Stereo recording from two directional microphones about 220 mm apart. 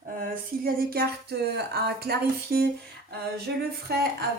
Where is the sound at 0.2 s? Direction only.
45° right (ahead or behind).